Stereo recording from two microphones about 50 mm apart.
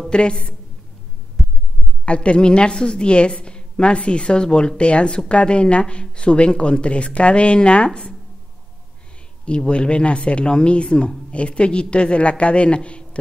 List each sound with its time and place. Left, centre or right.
0.1 s a woman's voice: centre
1.4 s heart sounds: centre
2.0 s speech: left
9.4 s speech: left